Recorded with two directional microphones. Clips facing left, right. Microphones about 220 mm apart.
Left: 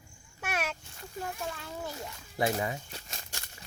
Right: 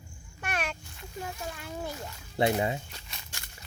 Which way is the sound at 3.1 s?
45° left (ahead or behind).